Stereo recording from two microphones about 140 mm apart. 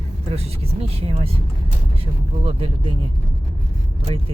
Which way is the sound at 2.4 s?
40° right (ahead or behind).